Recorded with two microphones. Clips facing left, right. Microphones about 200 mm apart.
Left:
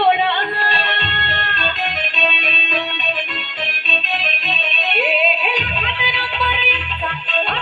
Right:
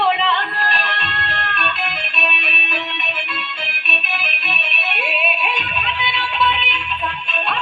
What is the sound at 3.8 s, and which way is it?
Music, 60° left (ahead or behind).